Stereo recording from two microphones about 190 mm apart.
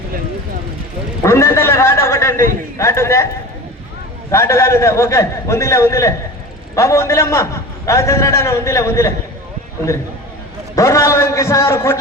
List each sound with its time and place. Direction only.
1.2 s a sound: 15° left (ahead or behind)
2.7 s a man's voice: 15° left (ahead or behind)
4.3 s a man's voice: 15° left (ahead or behind)
10.8 s a man's voice: 15° left (ahead or behind)